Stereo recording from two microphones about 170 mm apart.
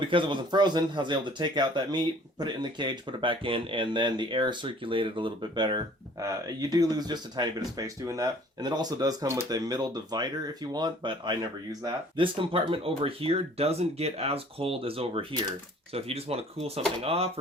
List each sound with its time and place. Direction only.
0.0 s speech: 30° right (ahead or behind)